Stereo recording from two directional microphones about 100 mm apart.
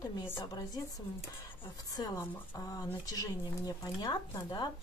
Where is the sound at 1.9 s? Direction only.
35° left (ahead or behind).